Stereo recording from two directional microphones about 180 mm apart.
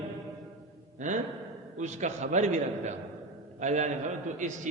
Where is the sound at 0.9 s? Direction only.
45° right (ahead or behind).